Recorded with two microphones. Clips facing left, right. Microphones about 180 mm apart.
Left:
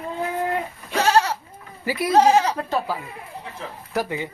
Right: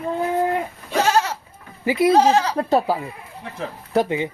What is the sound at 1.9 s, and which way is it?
Speech, 20° right (ahead or behind).